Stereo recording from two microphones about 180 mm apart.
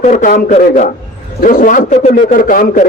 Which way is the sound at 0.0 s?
50° left (ahead or behind).